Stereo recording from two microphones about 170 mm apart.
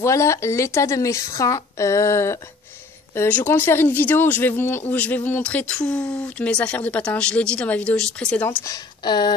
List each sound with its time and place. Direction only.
0.0 s speech: 15° left (ahead or behind)
8.5 s speech: 20° left (ahead or behind)